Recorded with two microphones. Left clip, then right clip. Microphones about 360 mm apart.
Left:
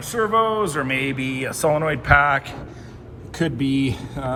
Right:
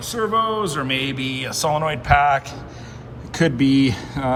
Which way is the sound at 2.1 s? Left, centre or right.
Right.